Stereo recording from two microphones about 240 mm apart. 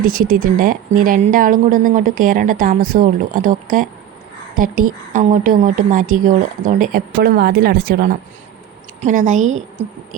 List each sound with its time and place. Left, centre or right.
0.0 s a woman's voice: right